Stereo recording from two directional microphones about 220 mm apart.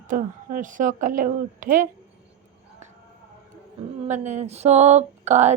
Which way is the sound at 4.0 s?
30° right (ahead or behind).